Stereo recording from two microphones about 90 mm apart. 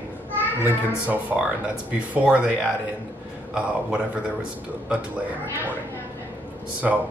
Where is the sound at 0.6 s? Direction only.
20° right (ahead or behind).